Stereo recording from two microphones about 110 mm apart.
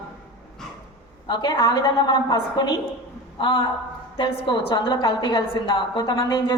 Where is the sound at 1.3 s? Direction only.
40° left (ahead or behind).